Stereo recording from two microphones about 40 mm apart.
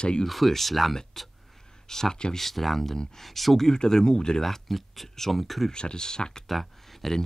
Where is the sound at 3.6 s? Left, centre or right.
Centre.